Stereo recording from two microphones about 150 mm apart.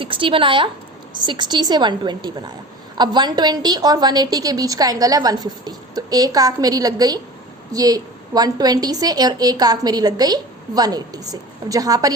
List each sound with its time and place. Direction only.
0.0 s a woman's voice: 35° right (ahead or behind)